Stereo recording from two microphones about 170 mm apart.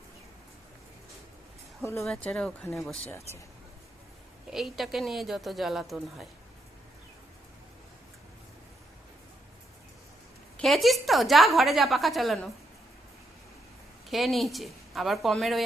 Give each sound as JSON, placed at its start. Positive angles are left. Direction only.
{"t": 1.8, "sound": "speech", "side_deg": 15}
{"t": 2.0, "sound": "speech", "side_deg": 5}
{"t": 4.5, "sound": "a woman's voice", "side_deg": 0}
{"t": 10.6, "sound": "a woman's voice", "side_deg": 0}
{"t": 14.1, "sound": "a woman's voice", "side_deg": 0}